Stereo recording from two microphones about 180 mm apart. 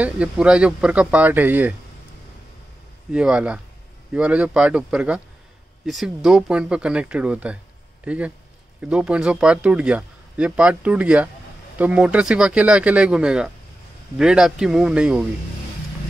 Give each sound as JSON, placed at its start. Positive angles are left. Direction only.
{"t": 0.0, "sound": "speech", "side_deg": -5}
{"t": 3.1, "sound": "speech", "side_deg": -5}